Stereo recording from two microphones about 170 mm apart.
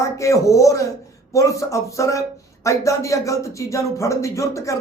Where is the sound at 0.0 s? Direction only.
20° left (ahead or behind).